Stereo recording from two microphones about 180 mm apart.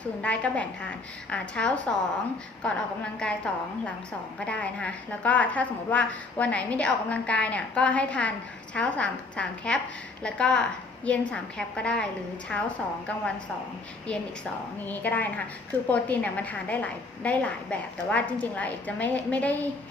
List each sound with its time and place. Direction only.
0.2 s a woman's voice: 5° left (ahead or behind)
14.8 s a woman's voice: 10° left (ahead or behind)